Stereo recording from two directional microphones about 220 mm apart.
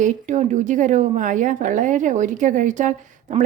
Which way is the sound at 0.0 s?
35° right (ahead or behind).